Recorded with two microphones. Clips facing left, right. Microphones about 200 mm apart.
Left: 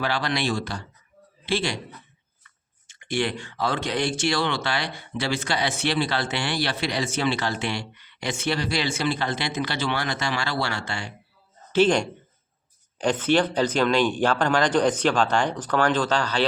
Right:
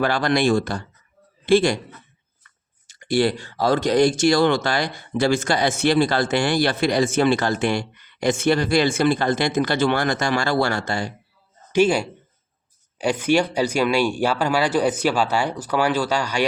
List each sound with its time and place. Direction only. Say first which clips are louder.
0.0 s speech: right 7 dB; 50° right (ahead or behind)
2.8 s speech: right 7 dB; 35° right (ahead or behind)
11.7 s speech: right 2 dB; 10° right (ahead or behind)